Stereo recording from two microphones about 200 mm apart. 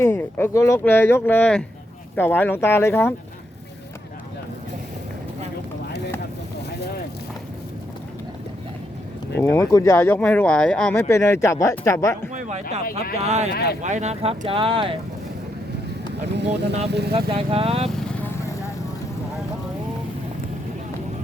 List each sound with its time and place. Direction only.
0.0 s speech: 10° left (ahead or behind)
9.6 s speech: 15° left (ahead or behind)
12.3 s speech: 35° right (ahead or behind)
13.5 s speech: 50° left (ahead or behind)
13.8 s speech: 35° right (ahead or behind)
16.4 s speech: 60° right (ahead or behind)
17.1 s speech: 30° right (ahead or behind)
17.8 s vehicle: 5° left (ahead or behind)